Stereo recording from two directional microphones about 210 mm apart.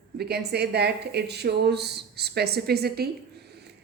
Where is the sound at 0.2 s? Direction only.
50° right (ahead or behind).